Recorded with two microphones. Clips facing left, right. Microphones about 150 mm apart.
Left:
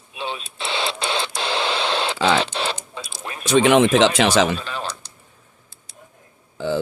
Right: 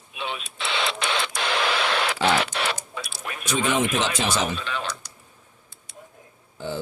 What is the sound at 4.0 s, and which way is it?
Speech, 90° left.